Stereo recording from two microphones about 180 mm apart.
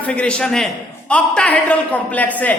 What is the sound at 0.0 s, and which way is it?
A man's voice, 5° left (ahead or behind).